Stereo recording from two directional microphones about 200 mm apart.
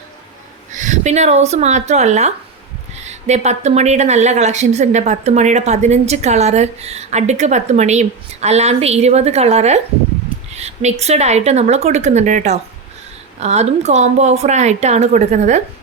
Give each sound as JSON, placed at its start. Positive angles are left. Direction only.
{"t": 0.7, "sound": "a woman's voice", "side_deg": -40}